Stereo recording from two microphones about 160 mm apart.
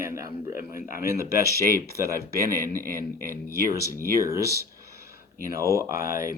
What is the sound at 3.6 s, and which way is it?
Speech, 20° right (ahead or behind).